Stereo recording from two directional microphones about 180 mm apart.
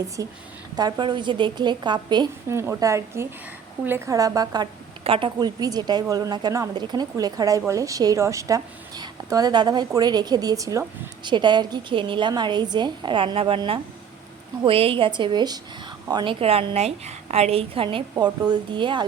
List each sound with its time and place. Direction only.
0.2 s a woman's voice: 20° right (ahead or behind)